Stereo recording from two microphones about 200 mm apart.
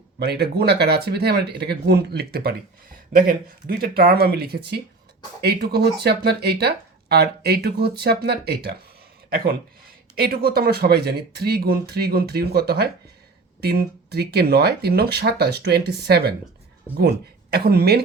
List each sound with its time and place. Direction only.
0.2 s speech: 55° right (ahead or behind)
17.5 s speech: 50° right (ahead or behind)